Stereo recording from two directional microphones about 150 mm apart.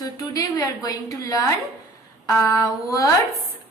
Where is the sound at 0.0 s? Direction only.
25° left (ahead or behind).